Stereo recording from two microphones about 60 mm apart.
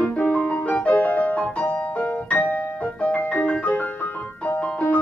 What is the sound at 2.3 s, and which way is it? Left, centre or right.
Music, left.